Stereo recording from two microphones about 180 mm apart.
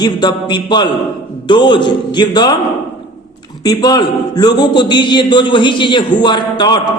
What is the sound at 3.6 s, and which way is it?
A man's voice, 20° left (ahead or behind).